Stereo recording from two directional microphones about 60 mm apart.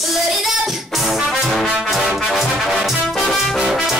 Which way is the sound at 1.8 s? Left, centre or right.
Centre.